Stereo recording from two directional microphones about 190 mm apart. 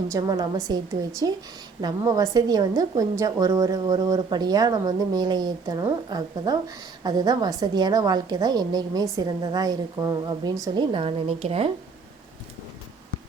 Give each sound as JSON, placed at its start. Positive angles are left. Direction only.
{"t": 0.1, "sound": "a woman's voice", "side_deg": -20}